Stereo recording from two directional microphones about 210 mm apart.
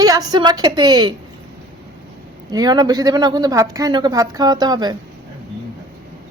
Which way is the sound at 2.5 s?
20° right (ahead or behind).